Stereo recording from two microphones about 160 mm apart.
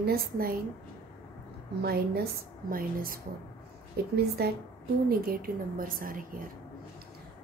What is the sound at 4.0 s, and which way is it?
Speech, 80° right.